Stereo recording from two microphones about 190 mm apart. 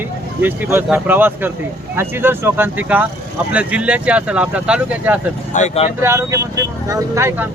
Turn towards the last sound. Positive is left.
turn(degrees=-15)  # may be behind; listen again after turning